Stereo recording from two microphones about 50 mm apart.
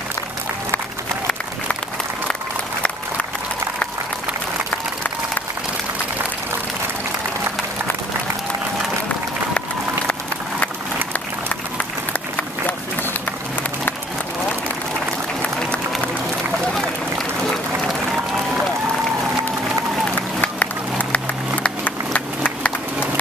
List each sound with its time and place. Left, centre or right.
12.1 s run: left
18.3 s applause: centre
20.1 s run: left
21.6 s a sound: left